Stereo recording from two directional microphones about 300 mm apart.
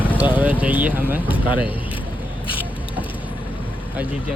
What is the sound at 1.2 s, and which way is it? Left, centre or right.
Speech, centre.